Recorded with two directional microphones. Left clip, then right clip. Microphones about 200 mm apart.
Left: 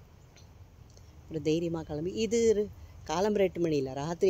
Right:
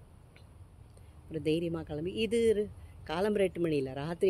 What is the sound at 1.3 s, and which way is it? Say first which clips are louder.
Speech: left 2 dB; 20° left (ahead or behind).